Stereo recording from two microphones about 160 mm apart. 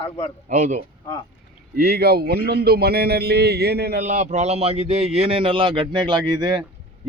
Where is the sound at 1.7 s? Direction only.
80° right.